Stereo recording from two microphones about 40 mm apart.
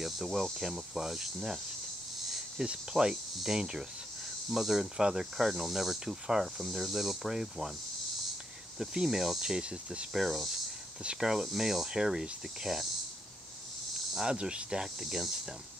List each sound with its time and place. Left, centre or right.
0.0 s cricket: centre
2.6 s cricket: centre
4.5 s speech: centre
4.9 s cricket: centre
8.7 s cricket: centre
10.1 s speech: centre
11.1 s cricket: centre
14.2 s cricket: right